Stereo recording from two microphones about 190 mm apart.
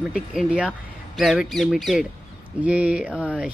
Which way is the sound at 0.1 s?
5° right (ahead or behind).